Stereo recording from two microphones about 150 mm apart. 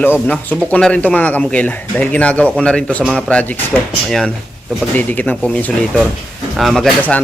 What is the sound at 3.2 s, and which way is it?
Speech, 10° left (ahead or behind).